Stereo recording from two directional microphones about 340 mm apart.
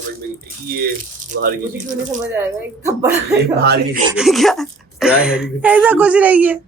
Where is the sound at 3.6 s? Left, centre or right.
Right.